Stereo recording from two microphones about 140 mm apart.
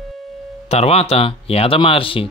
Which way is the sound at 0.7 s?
50° left (ahead or behind).